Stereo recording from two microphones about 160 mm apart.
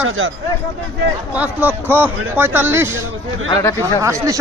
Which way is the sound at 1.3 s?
10° right (ahead or behind).